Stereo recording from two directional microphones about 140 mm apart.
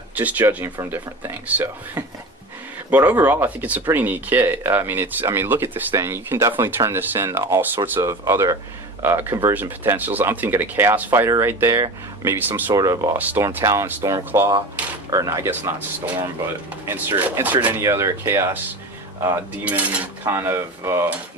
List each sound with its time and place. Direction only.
0.2 s speech: 10° right (ahead or behind)
12.7 s cutlery: 25° right (ahead or behind)
13.1 s speech: 10° right (ahead or behind)
13.4 s cutlery: 20° right (ahead or behind)
16.8 s speech: 15° right (ahead or behind)
17.6 s cutlery: 15° right (ahead or behind)
19.6 s cutlery: 10° right (ahead or behind)